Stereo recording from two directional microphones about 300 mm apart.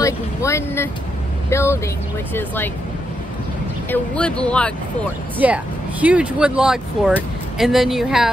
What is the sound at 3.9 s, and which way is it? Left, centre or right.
Speech, centre.